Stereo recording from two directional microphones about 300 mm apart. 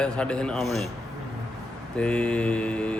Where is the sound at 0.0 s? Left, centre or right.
Centre.